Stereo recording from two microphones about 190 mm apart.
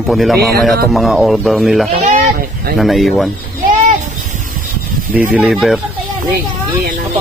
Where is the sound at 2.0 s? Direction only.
45° right (ahead or behind).